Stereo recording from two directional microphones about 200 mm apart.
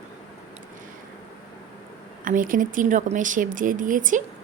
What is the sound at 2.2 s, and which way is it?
Speech, 40° right (ahead or behind).